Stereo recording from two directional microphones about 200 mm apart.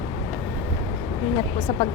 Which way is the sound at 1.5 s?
25° left (ahead or behind).